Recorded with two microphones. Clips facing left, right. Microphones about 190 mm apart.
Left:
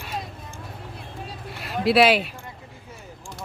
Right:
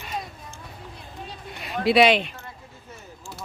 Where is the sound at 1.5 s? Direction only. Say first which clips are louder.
Even; centre (ahead or behind).